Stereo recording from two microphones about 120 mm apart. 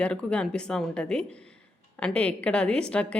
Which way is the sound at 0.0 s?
10° left (ahead or behind).